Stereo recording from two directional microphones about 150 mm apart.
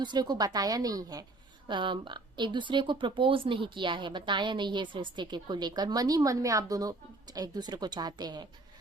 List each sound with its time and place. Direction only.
0.0 s speech: 30° right (ahead or behind)